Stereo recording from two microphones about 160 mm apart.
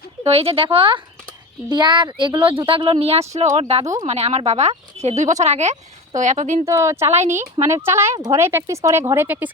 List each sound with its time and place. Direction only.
0.3 s speech: 40° right (ahead or behind)
6.7 s speech: 15° right (ahead or behind)